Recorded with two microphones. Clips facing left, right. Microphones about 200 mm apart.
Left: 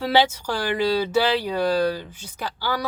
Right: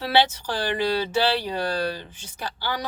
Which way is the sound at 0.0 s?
10° left (ahead or behind).